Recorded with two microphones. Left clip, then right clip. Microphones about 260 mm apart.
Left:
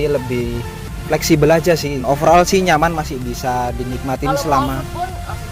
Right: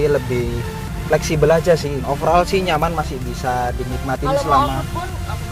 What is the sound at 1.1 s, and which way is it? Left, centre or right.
Speech, left.